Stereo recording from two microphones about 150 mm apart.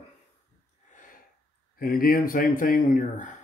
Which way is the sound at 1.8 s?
75° left (ahead or behind).